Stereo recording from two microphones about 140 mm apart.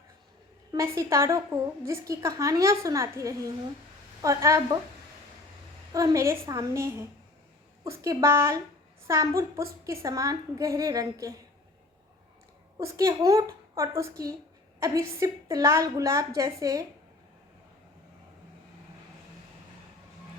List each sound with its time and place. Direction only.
0.7 s a woman's voice: 20° right (ahead or behind)
5.9 s a woman's voice: 25° right (ahead or behind)
12.8 s a woman's voice: 20° right (ahead or behind)